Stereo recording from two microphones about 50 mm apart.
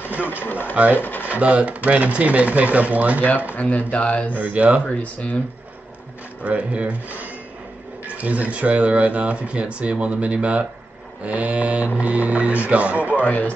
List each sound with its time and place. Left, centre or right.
0.1 s speech: left
1.2 s speech: right
3.5 s speech: left
4.4 s speech: right
4.8 s speech: left
6.4 s speech: right
13.1 s speech: left